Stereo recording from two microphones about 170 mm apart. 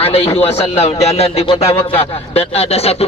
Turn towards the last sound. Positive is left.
turn(degrees=35)  # may be behind; listen again after turning